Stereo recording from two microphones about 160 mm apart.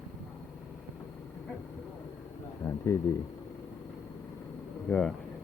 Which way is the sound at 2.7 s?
15° left (ahead or behind).